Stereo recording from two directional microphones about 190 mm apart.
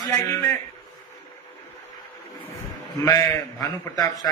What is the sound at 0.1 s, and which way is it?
Speech, 15° left (ahead or behind).